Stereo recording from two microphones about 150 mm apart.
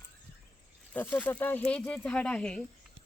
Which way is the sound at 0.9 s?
10° left (ahead or behind).